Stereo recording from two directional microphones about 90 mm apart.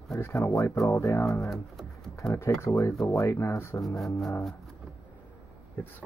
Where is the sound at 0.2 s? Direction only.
30° left (ahead or behind).